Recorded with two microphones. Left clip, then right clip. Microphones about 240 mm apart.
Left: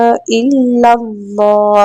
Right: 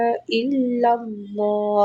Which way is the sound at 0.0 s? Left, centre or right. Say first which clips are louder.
Left 10 dB; left.